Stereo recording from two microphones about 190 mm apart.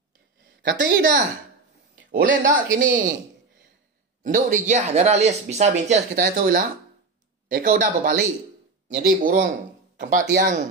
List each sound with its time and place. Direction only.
0.6 s speech: 65° right (ahead or behind)
2.0 s speech: 45° right (ahead or behind)
4.2 s speech: 45° right (ahead or behind)
6.1 s speech: 50° right (ahead or behind)